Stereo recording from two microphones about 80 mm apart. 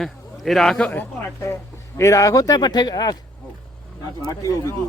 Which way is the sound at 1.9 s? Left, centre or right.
Left.